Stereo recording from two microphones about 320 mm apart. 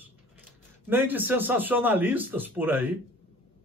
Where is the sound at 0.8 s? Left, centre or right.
Centre.